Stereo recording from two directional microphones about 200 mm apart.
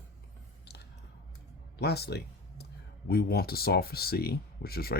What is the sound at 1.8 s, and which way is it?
Speech, 55° left (ahead or behind).